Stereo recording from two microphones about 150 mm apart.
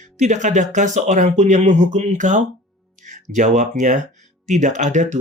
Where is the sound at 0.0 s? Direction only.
50° right (ahead or behind).